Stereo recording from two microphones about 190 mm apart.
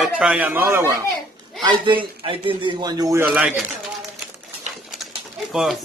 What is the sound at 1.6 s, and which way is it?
A man's voice, 25° right (ahead or behind).